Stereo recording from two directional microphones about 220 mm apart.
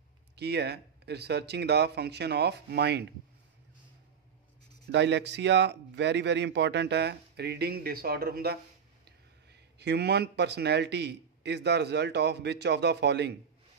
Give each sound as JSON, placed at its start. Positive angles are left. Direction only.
{"t": 0.4, "sound": "speech", "side_deg": -50}
{"t": 4.9, "sound": "speech", "side_deg": -50}